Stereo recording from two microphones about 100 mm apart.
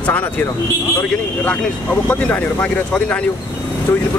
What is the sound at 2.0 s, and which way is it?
Speech, 15° left (ahead or behind).